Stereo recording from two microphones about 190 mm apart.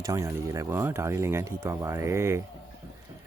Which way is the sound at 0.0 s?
15° right (ahead or behind).